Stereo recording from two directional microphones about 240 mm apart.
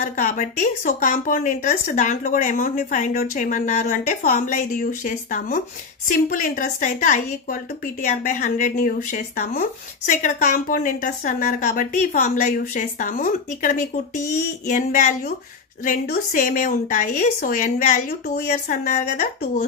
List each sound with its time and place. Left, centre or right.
0.0 s a woman's voice: left